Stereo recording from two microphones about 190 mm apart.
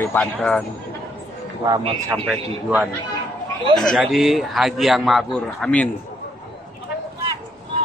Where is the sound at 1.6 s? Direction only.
25° right (ahead or behind).